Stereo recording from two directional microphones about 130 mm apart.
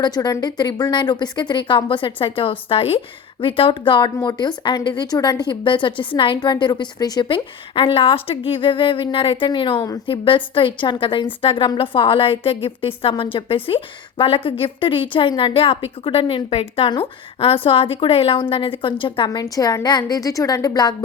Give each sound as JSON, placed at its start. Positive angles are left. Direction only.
{"t": 0.0, "sound": "a woman's voice", "side_deg": 30}